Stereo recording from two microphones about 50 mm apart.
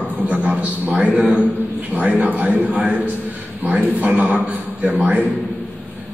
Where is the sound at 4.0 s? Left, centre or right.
Right.